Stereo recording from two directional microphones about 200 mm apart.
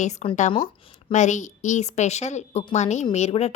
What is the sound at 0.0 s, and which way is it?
A woman's voice, 35° left (ahead or behind).